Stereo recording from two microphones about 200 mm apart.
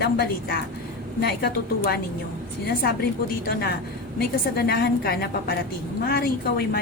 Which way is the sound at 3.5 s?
50° left (ahead or behind).